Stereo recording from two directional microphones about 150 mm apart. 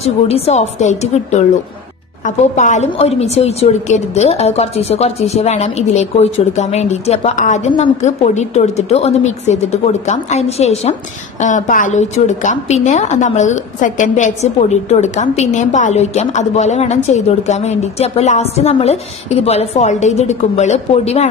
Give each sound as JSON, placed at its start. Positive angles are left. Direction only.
{"t": 0.0, "sound": "a woman's voice", "side_deg": 45}
{"t": 11.4, "sound": "a woman's voice", "side_deg": 60}